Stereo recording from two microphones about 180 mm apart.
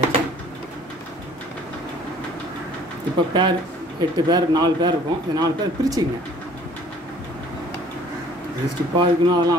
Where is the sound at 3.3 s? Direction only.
25° right (ahead or behind).